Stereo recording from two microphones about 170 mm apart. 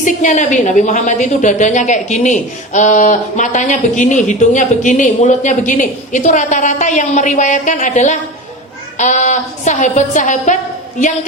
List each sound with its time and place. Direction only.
0.0 s a woman's voice: 45° left (ahead or behind)